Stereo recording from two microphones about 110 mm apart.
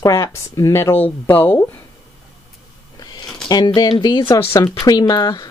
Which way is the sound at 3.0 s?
40° left (ahead or behind).